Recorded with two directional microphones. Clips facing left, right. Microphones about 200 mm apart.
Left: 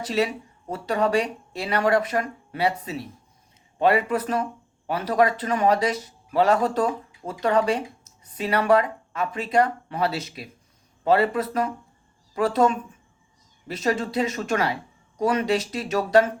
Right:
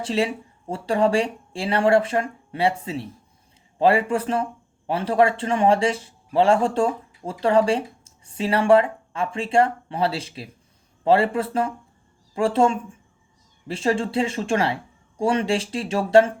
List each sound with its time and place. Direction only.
0.0 s a man's voice: 30° right (ahead or behind)